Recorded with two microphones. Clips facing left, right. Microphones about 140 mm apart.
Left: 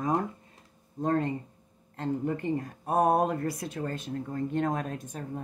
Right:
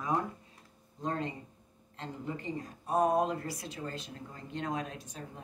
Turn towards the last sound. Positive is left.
turn(degrees=50)  # may be behind; listen again after turning